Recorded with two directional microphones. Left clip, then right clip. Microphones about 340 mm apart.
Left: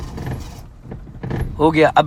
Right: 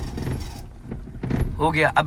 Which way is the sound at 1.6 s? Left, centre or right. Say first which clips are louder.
Left 7 dB; centre.